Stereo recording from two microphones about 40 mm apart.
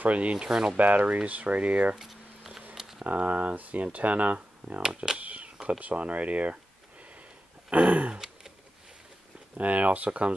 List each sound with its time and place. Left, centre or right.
0.0 s speech: right
0.5 s speech: centre
0.7 s speech: right
2.0 s a sound: centre
2.7 s camera: centre
3.1 s speech: right
4.8 s speech: centre
5.2 s a sound: right
5.7 s speech: right
7.7 s speech: right
9.6 s speech: right